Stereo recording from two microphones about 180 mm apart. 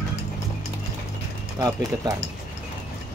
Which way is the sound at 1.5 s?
20° right (ahead or behind).